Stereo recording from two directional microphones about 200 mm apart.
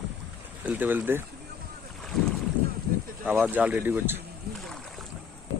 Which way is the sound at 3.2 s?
10° right (ahead or behind).